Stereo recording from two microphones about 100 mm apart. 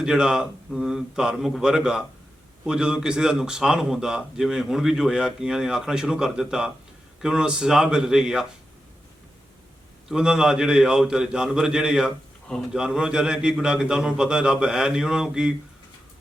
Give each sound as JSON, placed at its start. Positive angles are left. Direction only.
{"t": 0.0, "sound": "speech", "side_deg": -5}
{"t": 10.1, "sound": "speech", "side_deg": -5}